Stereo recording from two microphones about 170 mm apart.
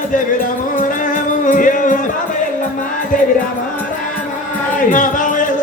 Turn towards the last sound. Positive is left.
turn(degrees=50)  # may be behind; listen again after turning